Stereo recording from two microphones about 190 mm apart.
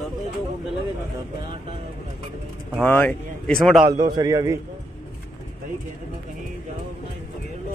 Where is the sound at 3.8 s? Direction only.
20° right (ahead or behind).